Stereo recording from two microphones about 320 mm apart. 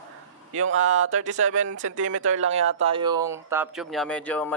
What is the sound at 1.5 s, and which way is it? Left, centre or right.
Speech, right.